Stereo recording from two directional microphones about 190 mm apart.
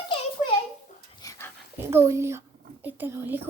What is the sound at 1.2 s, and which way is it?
Dog, 15° left (ahead or behind).